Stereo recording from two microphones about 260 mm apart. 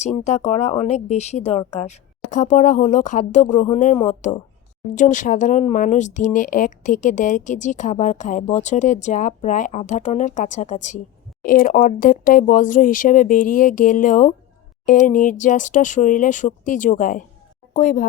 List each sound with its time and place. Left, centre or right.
0.0 s speech: left